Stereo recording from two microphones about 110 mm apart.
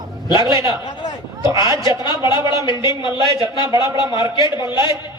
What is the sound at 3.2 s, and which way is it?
Speech, 40° right (ahead or behind).